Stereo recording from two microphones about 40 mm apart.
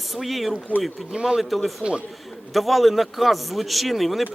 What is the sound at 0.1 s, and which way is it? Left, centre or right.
Speech, centre.